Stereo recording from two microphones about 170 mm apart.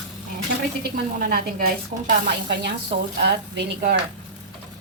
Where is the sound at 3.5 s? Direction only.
70° right (ahead or behind).